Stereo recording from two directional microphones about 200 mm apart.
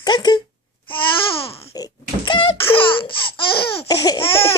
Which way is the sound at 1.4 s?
30° left (ahead or behind).